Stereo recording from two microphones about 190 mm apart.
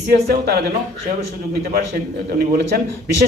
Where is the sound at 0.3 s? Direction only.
55° right (ahead or behind).